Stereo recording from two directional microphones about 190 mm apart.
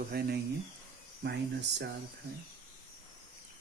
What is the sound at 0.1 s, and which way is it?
Speech, 55° right (ahead or behind).